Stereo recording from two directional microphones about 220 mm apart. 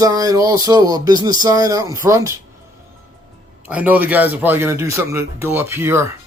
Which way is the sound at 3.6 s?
5° right (ahead or behind).